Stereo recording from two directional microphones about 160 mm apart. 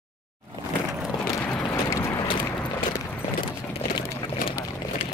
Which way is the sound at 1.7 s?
20° left (ahead or behind).